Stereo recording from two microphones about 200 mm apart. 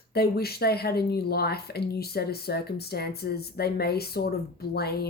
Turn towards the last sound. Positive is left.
turn(degrees=50)  # may be behind; listen again after turning